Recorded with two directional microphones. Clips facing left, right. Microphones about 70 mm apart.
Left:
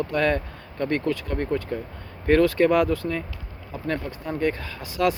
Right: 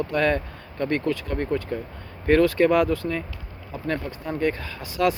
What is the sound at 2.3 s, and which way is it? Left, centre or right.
Speech, right.